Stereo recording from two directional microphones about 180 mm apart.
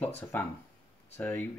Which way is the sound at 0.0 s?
10° left (ahead or behind).